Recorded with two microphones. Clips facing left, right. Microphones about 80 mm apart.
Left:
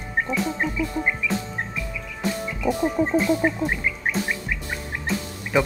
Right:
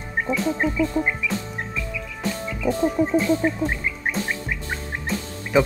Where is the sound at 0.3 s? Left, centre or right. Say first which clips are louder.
Right 6 dB; centre.